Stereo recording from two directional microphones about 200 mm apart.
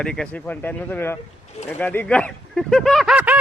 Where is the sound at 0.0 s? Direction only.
5° left (ahead or behind).